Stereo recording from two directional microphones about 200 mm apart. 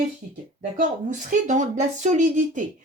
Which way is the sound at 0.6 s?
40° right (ahead or behind).